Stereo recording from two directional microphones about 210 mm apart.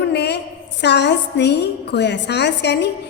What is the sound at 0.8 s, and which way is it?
A woman's voice, 55° left (ahead or behind).